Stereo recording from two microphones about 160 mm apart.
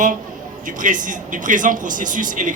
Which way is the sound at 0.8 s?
55° right (ahead or behind).